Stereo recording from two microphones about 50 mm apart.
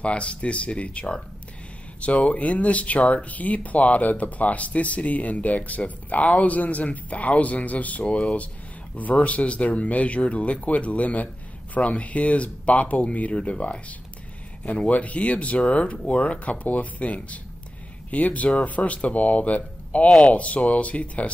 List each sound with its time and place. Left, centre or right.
0.0 s speech: left